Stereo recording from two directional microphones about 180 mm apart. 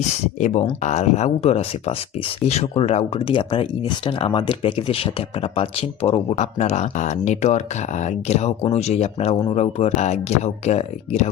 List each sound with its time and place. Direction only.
0.3 s speech: 40° left (ahead or behind)